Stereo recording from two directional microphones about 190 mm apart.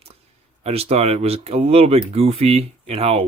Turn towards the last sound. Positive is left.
turn(degrees=-30)  # may be behind; listen again after turning